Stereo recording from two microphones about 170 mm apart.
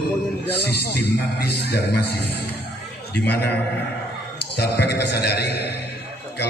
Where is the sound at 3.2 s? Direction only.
70° left (ahead or behind).